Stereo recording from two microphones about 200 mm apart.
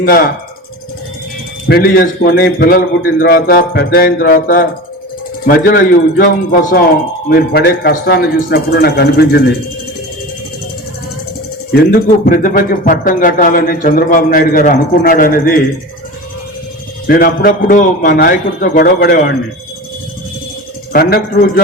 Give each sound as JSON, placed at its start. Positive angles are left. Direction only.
{"t": 0.0, "sound": "speech", "side_deg": 50}
{"t": 1.6, "sound": "speech", "side_deg": 50}
{"t": 11.7, "sound": "speech", "side_deg": 50}
{"t": 17.1, "sound": "speech", "side_deg": 45}
{"t": 20.9, "sound": "speech", "side_deg": 50}